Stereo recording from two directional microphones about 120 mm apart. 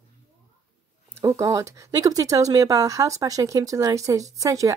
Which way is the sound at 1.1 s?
25° right (ahead or behind).